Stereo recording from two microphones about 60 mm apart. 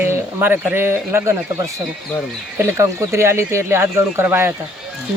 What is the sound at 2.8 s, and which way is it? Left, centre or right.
A man's voice, right.